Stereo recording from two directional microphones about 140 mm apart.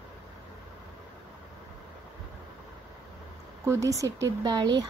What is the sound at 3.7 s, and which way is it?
Speech, 25° right (ahead or behind).